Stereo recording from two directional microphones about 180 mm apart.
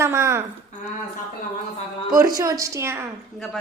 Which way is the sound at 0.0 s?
15° right (ahead or behind).